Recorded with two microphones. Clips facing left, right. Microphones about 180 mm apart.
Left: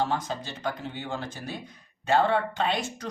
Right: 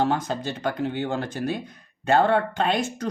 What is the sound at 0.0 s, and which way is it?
Speech, 55° right (ahead or behind).